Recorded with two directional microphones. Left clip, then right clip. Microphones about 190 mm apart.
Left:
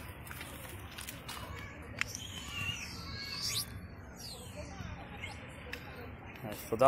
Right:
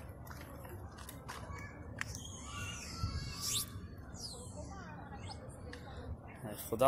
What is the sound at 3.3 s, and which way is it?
Music, centre (ahead or behind).